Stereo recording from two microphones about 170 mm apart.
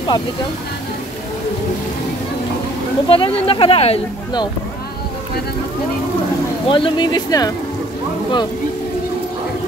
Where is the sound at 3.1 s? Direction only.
30° left (ahead or behind).